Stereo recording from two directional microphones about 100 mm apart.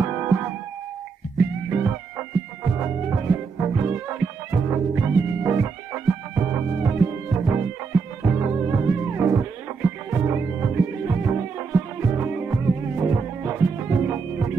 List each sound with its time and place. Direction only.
1.4 s music: 25° right (ahead or behind)